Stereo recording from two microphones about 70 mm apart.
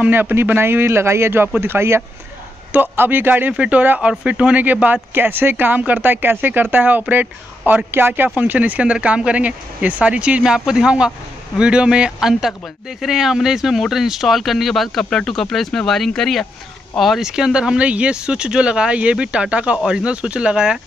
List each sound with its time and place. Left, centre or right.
0.1 s a man's voice: right; by 20.8 s centre